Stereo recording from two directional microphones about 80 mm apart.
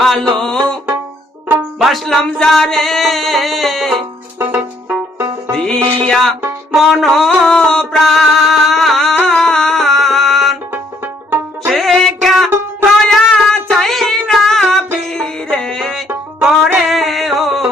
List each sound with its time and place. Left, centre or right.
0.0 s music: centre
1.8 s music: centre
4.4 s music: right
5.6 s music: centre
10.7 s banjo: right
11.7 s music: centre